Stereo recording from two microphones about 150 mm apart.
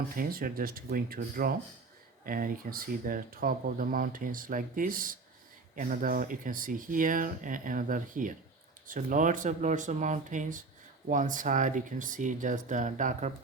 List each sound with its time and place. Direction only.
0.2 s speech: 75° right (ahead or behind)
2.2 s speech: 70° right (ahead or behind)